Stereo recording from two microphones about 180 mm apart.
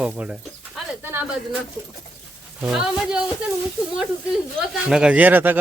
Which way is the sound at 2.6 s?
5° right (ahead or behind).